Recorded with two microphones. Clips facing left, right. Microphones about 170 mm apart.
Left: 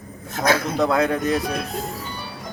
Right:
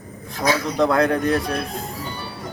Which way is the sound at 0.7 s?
Centre (ahead or behind).